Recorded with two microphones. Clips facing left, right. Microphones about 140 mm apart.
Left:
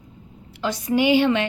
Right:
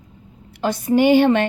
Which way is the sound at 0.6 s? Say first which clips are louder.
Right 4 dB; 50° right (ahead or behind).